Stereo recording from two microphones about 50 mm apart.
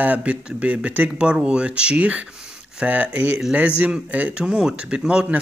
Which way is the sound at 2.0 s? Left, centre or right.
Right.